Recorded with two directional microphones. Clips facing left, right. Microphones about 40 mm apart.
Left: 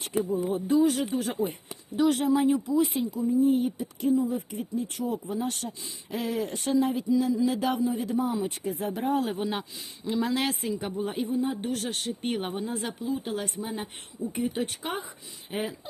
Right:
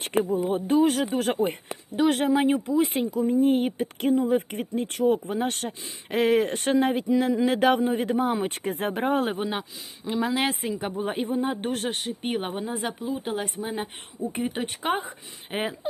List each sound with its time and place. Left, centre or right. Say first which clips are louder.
0.0 s speech: right 3 dB; right
2.0 s speech: right 2 dB; right
9.4 s speech: right 1 dB; centre; by 11.9 s right
11.9 s speech: right 2 dB; centre
14.3 s speech: left 1 dB; right